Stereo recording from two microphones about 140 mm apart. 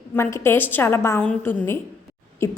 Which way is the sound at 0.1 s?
20° left (ahead or behind).